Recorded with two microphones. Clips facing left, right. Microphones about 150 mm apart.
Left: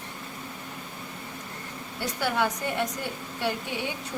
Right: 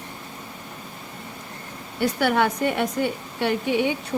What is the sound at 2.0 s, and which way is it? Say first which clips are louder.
A woman's voice: right 6 dB; 65° right (ahead or behind).